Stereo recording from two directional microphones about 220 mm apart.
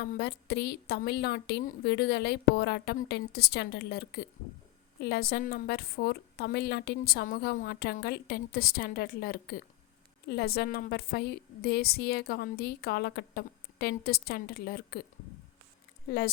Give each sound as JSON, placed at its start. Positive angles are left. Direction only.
{"t": 0.0, "sound": "a woman's voice", "side_deg": 45}
{"t": 16.0, "sound": "a woman's voice", "side_deg": 45}